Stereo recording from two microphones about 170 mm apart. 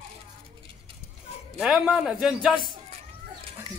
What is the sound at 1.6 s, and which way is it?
A man's voice, centre (ahead or behind).